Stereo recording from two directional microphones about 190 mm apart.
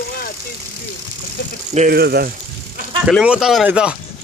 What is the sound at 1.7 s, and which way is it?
Speech, 50° right (ahead or behind).